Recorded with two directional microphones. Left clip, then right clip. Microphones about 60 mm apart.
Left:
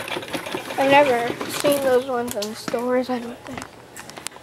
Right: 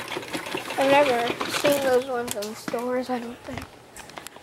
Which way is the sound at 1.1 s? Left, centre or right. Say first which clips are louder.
Left 2 dB; right.